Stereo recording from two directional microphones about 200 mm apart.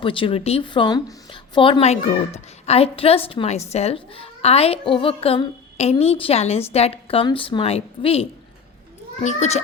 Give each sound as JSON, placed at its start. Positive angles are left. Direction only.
{"t": 0.0, "sound": "a child's voice", "side_deg": 25}